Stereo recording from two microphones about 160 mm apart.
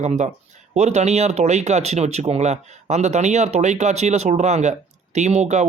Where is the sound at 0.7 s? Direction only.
45° right (ahead or behind).